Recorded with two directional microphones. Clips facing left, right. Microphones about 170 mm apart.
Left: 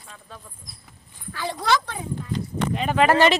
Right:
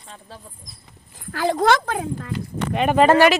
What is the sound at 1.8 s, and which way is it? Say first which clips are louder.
Speech: right 6 dB; 85° right.